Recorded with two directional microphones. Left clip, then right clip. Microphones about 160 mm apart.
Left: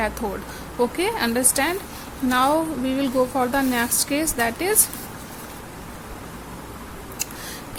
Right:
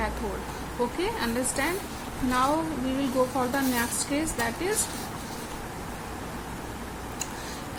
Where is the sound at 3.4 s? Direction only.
65° left (ahead or behind).